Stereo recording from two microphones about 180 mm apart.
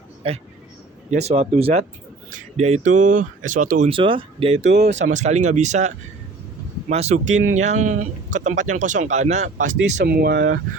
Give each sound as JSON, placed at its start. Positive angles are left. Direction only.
{"t": 0.2, "sound": "speech", "side_deg": -30}
{"t": 3.8, "sound": "speech", "side_deg": -30}
{"t": 10.0, "sound": "speech", "side_deg": -60}